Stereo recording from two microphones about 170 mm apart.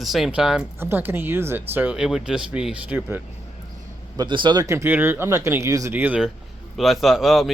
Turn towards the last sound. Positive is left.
turn(degrees=0)  # may be behind; listen again after turning